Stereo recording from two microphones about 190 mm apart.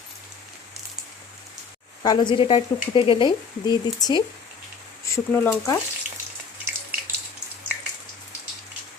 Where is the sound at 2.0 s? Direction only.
25° left (ahead or behind).